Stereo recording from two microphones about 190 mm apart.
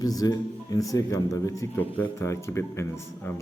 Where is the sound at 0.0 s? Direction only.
20° left (ahead or behind).